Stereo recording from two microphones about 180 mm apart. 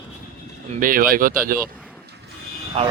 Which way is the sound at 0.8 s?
50° right (ahead or behind).